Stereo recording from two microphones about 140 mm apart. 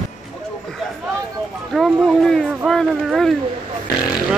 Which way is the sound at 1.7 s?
5° left (ahead or behind).